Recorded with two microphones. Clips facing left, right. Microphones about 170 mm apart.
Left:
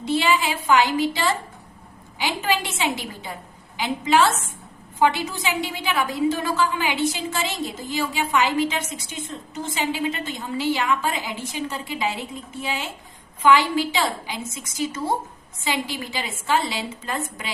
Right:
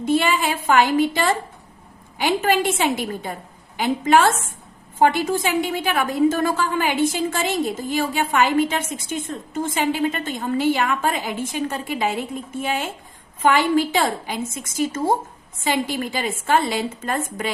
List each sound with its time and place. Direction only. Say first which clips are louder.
0.0 s a woman's voice: right 2 dB; 50° right (ahead or behind)